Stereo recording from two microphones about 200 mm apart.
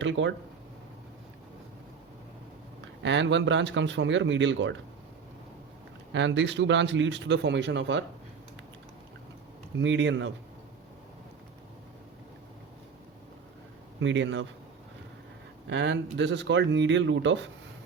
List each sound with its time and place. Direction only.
0.0 s speech: 70° right (ahead or behind)
3.0 s a man's voice: 65° right (ahead or behind)
6.1 s a man's voice: 65° right (ahead or behind)
9.7 s speech: 65° right (ahead or behind)
14.0 s speech: 70° right (ahead or behind)
15.7 s a man's voice: 60° right (ahead or behind)